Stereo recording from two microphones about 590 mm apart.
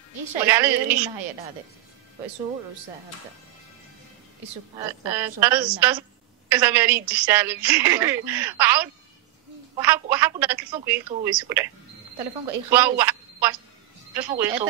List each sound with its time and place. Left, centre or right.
0.1 s music: right
0.5 s a woman's voice: centre
4.7 s a woman's voice: centre
12.2 s a woman's voice: right
12.6 s a woman's voice: centre